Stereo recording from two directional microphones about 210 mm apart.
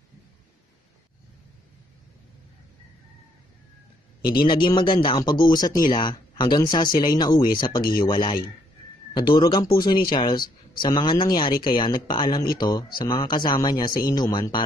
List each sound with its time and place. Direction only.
4.4 s speech: 25° left (ahead or behind)